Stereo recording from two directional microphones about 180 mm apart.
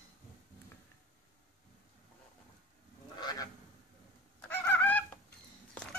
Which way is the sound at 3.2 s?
20° left (ahead or behind).